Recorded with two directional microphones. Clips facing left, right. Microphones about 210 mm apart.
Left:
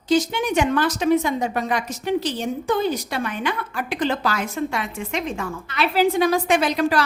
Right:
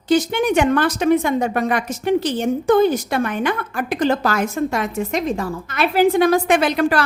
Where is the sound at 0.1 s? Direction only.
55° right (ahead or behind).